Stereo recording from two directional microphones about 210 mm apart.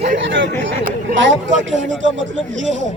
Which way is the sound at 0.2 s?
60° right (ahead or behind).